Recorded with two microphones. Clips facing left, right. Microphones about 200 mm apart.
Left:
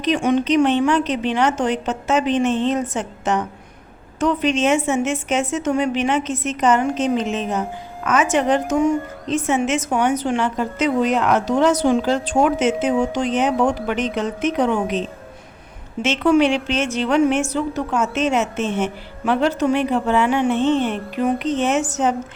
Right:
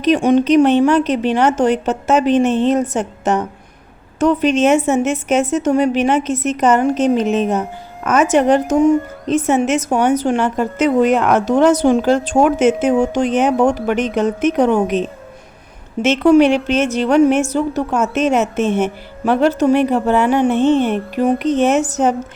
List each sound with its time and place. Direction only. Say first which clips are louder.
0.2 s a woman's voice: right 5 dB; 40° right (ahead or behind)
20.5 s a woman's voice: right 4 dB; 55° right (ahead or behind)